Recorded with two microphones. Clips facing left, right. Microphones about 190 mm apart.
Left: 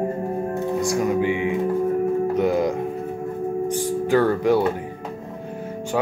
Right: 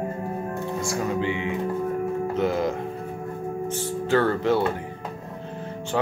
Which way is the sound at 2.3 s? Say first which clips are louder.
Left 4 dB; 15° left (ahead or behind).